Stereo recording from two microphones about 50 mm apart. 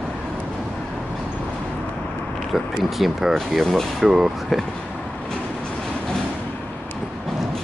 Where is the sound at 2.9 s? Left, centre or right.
Centre.